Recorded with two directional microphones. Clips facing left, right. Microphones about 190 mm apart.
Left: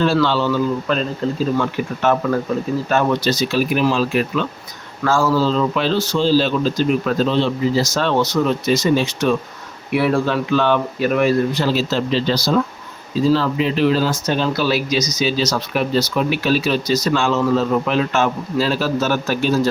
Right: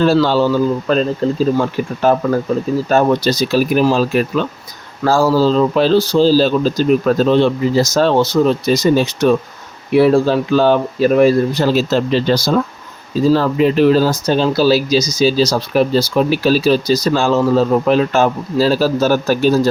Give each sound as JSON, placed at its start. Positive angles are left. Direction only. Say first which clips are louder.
{"t": 0.0, "sound": "speech", "louder": "right 4 dB", "side_deg": -40}
{"t": 9.9, "sound": "speech", "louder": "right 6 dB", "side_deg": -25}